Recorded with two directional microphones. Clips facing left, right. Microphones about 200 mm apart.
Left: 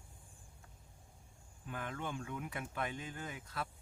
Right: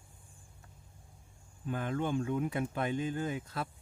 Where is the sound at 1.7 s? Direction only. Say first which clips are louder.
Right 9 dB; 30° right (ahead or behind).